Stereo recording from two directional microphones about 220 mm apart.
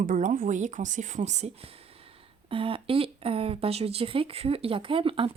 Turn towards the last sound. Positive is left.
turn(degrees=-25)  # may be behind; listen again after turning